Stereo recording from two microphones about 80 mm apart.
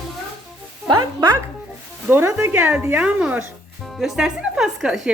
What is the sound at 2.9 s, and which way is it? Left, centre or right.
Speech, centre.